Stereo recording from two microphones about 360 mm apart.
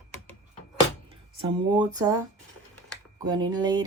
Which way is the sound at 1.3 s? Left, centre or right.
Centre.